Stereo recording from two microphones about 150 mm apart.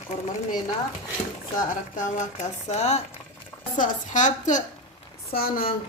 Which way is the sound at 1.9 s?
55° left (ahead or behind).